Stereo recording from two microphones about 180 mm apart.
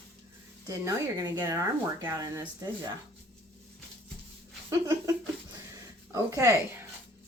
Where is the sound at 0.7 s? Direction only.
20° right (ahead or behind).